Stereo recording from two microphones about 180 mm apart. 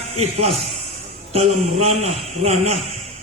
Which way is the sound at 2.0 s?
35° right (ahead or behind).